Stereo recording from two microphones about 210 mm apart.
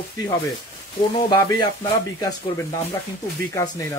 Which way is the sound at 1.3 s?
20° left (ahead or behind).